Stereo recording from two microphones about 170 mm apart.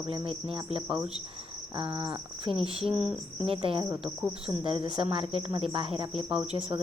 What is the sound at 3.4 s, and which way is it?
Speech, 35° right (ahead or behind).